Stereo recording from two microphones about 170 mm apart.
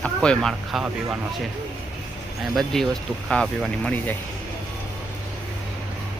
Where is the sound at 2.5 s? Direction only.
Centre (ahead or behind).